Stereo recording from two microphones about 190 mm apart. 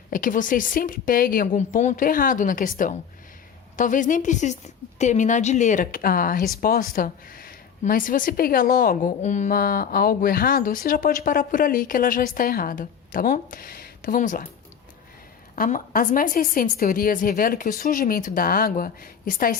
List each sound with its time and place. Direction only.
0.1 s speech: 45° left (ahead or behind)
15.5 s speech: 45° left (ahead or behind)